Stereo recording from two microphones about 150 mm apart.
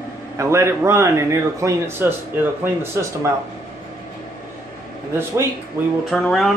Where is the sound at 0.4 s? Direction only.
20° right (ahead or behind).